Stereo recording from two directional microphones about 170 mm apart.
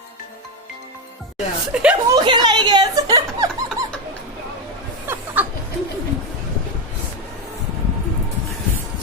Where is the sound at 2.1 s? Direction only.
25° right (ahead or behind).